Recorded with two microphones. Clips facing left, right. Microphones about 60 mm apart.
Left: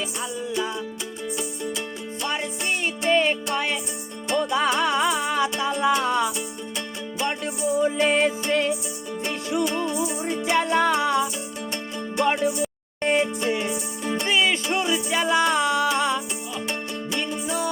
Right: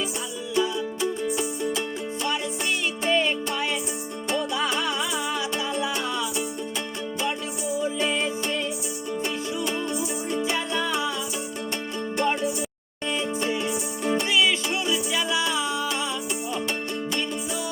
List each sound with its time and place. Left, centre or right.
2.2 s music: left
10.2 s music: left
14.0 s music: centre
14.3 s music: left